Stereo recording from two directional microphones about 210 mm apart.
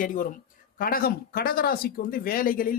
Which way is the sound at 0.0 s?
40° left (ahead or behind).